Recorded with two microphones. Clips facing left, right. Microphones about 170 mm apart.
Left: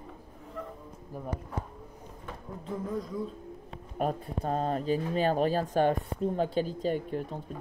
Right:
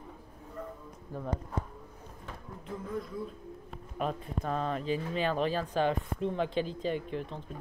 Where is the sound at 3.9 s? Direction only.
40° left (ahead or behind).